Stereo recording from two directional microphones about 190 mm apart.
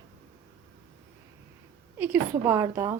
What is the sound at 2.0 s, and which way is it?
A woman's voice, 10° right (ahead or behind).